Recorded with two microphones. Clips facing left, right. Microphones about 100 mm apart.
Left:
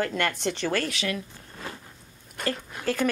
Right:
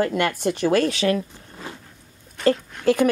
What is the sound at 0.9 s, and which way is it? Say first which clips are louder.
Speech: right 9 dB; 40° right (ahead or behind).